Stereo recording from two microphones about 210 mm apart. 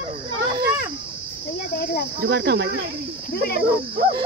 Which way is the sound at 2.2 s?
55° right (ahead or behind).